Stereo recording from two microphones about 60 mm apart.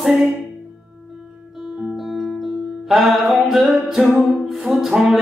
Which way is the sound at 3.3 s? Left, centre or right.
Centre.